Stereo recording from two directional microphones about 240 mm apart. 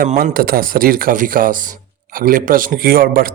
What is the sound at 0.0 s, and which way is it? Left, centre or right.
Speech, right.